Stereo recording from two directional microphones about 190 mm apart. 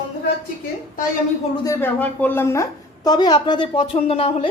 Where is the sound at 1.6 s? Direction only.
15° left (ahead or behind).